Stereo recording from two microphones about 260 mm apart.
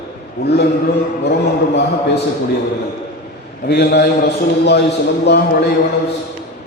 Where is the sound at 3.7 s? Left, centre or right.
Left.